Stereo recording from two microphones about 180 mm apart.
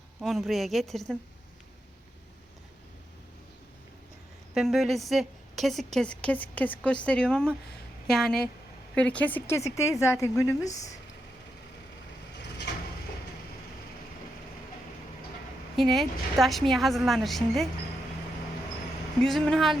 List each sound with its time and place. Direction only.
0.2 s a woman's voice: centre (ahead or behind)
4.5 s a woman's voice: centre (ahead or behind); by 10.9 s 20° left (ahead or behind)
15.7 s a woman's voice: centre (ahead or behind)
19.2 s a woman's voice: 5° left (ahead or behind)